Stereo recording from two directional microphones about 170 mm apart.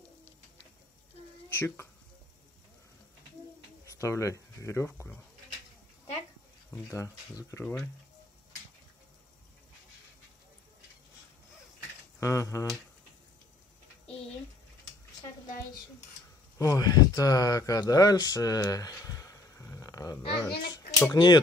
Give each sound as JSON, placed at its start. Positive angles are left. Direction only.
{"t": 1.5, "sound": "speech", "side_deg": 15}
{"t": 3.8, "sound": "speech", "side_deg": 20}
{"t": 6.7, "sound": "speech", "side_deg": 15}
{"t": 12.2, "sound": "speech", "side_deg": 20}
{"t": 16.5, "sound": "speech", "side_deg": 20}
{"t": 20.2, "sound": "a child's voice", "side_deg": 30}